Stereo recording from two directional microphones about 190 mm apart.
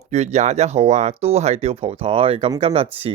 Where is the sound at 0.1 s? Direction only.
35° right (ahead or behind).